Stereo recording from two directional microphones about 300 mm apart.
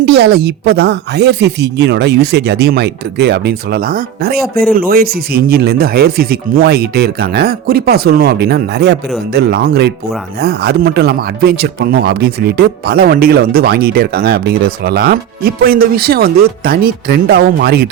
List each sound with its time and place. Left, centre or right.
0.0 s speech: right